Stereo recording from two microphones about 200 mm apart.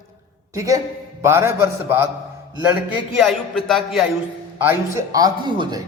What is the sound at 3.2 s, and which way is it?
Speech, centre (ahead or behind).